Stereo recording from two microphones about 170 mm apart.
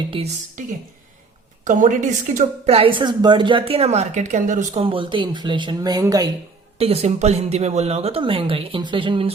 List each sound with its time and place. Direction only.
0.1 s a woman's voice: 30° right (ahead or behind)
1.6 s a woman's voice: 50° right (ahead or behind)
4.8 s a woman's voice: 30° right (ahead or behind)
6.7 s a woman's voice: 35° right (ahead or behind)